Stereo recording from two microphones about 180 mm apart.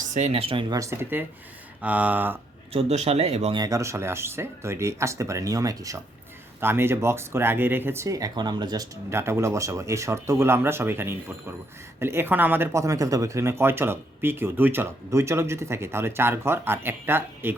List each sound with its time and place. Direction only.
0.1 s speech: 40° right (ahead or behind); by 2.4 s 10° right (ahead or behind)
2.7 s speech: 35° right (ahead or behind)
3.6 s speech: 15° right (ahead or behind)